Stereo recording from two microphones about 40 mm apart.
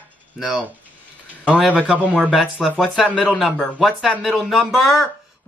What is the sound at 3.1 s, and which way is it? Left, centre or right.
Speech, left.